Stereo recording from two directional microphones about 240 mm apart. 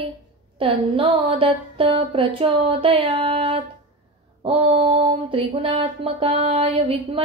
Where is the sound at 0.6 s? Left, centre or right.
Right.